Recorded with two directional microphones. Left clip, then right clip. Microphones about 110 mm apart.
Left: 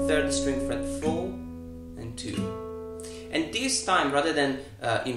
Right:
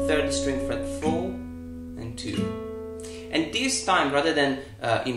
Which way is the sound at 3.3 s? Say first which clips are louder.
Right 3 dB; 15° right (ahead or behind).